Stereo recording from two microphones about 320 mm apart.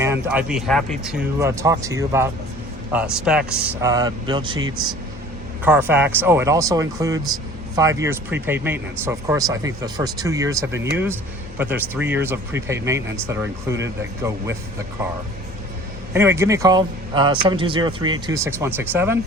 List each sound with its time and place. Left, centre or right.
0.0 s speech: centre
16.1 s speech: centre